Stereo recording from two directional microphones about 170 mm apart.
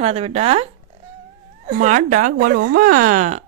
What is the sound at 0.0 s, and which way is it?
Speech, 35° right (ahead or behind).